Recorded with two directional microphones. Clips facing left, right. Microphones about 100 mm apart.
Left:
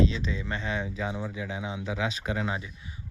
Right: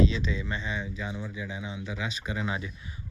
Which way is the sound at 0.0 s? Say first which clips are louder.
Right 1 dB; 45° left (ahead or behind).